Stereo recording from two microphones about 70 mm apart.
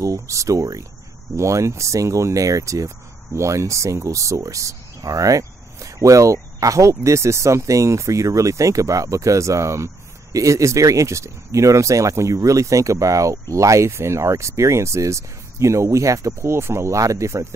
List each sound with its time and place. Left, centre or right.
0.0 s speech: right